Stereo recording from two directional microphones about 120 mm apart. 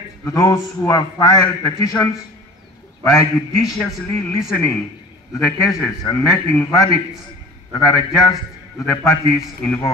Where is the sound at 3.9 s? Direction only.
25° left (ahead or behind).